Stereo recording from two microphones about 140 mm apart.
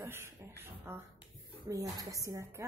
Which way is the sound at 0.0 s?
15° right (ahead or behind).